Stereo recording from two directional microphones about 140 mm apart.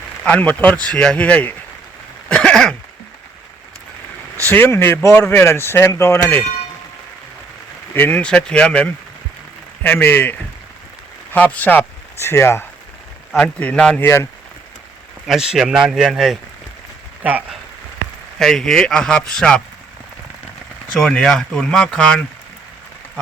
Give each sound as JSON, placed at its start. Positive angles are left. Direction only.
{"t": 0.3, "sound": "speech", "side_deg": 10}
{"t": 2.3, "sound": "throat clearing", "side_deg": 5}
{"t": 4.4, "sound": "speech", "side_deg": 15}
{"t": 7.9, "sound": "speech", "side_deg": 10}
{"t": 14.0, "sound": "speech", "side_deg": 20}
{"t": 15.3, "sound": "speech", "side_deg": -5}
{"t": 17.2, "sound": "speech", "side_deg": -10}
{"t": 18.3, "sound": "speech", "side_deg": 5}
{"t": 20.9, "sound": "speech", "side_deg": 5}